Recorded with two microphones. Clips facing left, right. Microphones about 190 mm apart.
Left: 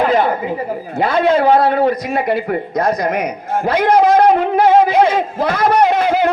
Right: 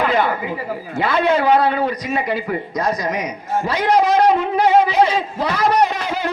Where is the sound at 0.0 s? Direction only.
40° left (ahead or behind).